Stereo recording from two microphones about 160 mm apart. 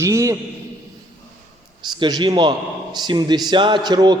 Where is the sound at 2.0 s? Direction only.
25° right (ahead or behind).